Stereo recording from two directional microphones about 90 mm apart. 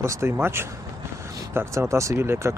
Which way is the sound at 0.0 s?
30° right (ahead or behind).